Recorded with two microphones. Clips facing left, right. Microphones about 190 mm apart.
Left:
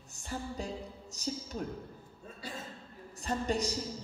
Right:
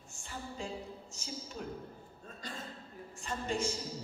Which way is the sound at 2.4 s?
10° left (ahead or behind).